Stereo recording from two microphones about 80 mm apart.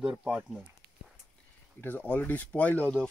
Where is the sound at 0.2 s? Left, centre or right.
Centre.